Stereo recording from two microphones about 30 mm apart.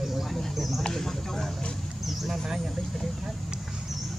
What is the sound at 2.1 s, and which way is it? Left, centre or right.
Speech, centre.